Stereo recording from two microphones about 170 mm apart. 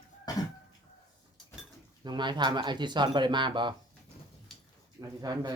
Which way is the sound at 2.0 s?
25° right (ahead or behind).